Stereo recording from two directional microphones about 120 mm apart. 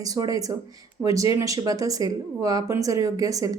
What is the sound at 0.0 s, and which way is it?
Speech, 30° right (ahead or behind).